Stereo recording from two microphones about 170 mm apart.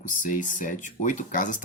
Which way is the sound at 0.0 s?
50° left (ahead or behind).